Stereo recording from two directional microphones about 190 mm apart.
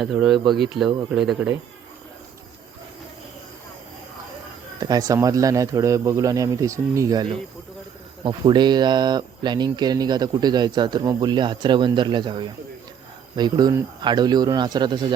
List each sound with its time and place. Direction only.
0.0 s speech: centre (ahead or behind)
4.8 s speech: 20° right (ahead or behind)